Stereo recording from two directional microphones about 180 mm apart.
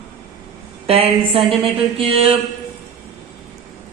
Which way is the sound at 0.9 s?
30° right (ahead or behind).